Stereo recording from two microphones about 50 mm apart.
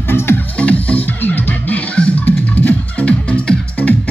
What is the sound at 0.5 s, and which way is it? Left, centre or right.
Music, left.